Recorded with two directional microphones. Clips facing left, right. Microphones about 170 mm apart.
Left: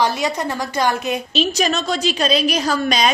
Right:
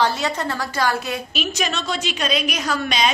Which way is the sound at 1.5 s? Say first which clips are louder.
Left 5 dB; 40° left (ahead or behind).